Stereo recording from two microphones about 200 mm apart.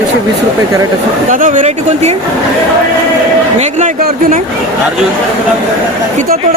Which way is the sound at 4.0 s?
50° right (ahead or behind).